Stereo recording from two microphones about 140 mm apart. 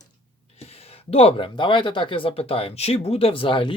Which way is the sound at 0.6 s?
45° left (ahead or behind).